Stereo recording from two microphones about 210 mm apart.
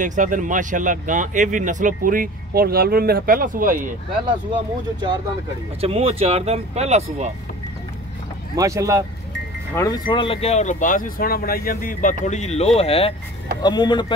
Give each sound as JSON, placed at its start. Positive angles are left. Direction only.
{"t": 0.0, "sound": "speech", "side_deg": -35}
{"t": 5.8, "sound": "speech", "side_deg": -30}
{"t": 8.5, "sound": "speech", "side_deg": -15}
{"t": 9.8, "sound": "speech", "side_deg": 20}